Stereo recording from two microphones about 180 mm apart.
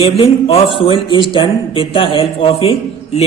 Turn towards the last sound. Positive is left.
turn(degrees=35)  # may be behind; listen again after turning